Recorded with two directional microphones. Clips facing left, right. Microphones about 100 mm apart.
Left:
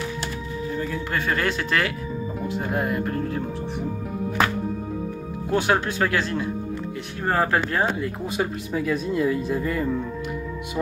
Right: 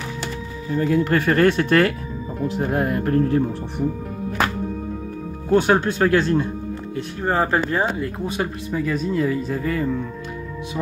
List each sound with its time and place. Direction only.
0.7 s speech: 65° right (ahead or behind); by 3.4 s 45° right (ahead or behind)
5.5 s speech: 35° right (ahead or behind)
7.2 s speech: 20° right (ahead or behind)
8.0 s speech: 5° left (ahead or behind)